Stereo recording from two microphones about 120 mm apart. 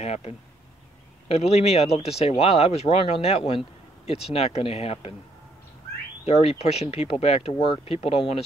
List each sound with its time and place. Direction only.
0.0 s speech: 60° left (ahead or behind)
6.2 s speech: 55° left (ahead or behind)